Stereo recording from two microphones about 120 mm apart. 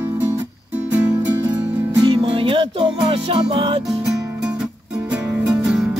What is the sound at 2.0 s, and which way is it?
Music, 45° right (ahead or behind).